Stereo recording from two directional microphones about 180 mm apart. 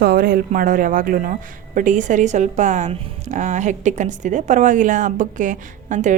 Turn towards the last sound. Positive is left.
turn(degrees=-45)  # may be behind; listen again after turning